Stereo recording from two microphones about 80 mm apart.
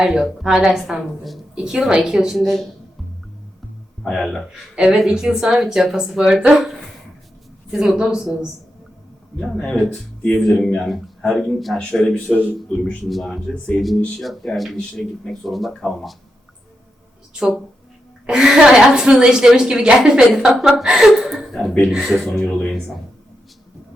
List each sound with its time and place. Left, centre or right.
0.0 s a woman's voice: centre
4.0 s speech: centre
4.7 s a woman's voice: centre
9.6 s speech: centre
13.1 s speech: centre
14.2 s speech: centre
18.3 s a woman's voice: centre